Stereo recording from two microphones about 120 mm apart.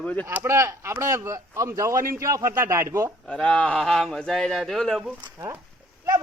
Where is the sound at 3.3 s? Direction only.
10° left (ahead or behind).